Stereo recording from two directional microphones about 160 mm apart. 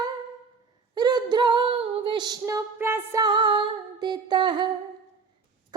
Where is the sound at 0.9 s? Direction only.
25° right (ahead or behind).